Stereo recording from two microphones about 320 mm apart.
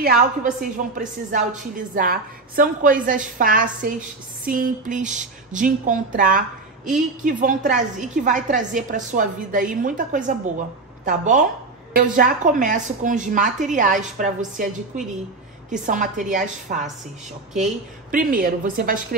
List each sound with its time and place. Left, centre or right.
0.0 s a woman's voice: right
15.7 s a woman's voice: right
18.1 s a woman's voice: right